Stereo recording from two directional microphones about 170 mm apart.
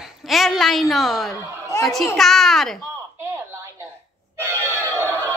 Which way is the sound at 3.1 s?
15° right (ahead or behind).